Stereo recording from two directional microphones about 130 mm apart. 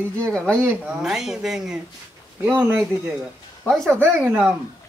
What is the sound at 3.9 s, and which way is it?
Speech, 15° right (ahead or behind).